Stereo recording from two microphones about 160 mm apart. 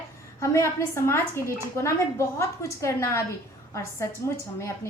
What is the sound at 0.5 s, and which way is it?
A woman's voice, 15° left (ahead or behind).